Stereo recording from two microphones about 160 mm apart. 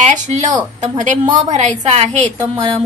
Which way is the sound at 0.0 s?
50° right (ahead or behind).